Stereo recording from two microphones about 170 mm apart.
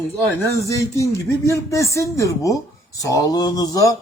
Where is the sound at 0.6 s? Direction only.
20° left (ahead or behind).